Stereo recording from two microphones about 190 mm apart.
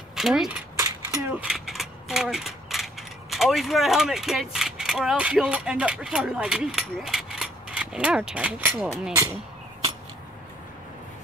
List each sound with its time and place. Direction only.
0.1 s speech: centre (ahead or behind)
0.7 s coin: 15° right (ahead or behind)
1.4 s speech: centre (ahead or behind)